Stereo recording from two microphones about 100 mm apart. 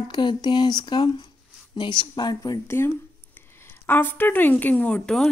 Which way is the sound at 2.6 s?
25° left (ahead or behind).